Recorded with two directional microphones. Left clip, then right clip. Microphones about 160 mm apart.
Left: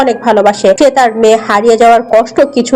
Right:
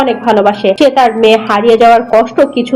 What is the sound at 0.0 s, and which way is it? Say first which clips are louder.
A woman's voice: left 1 dB; 35° left (ahead or behind).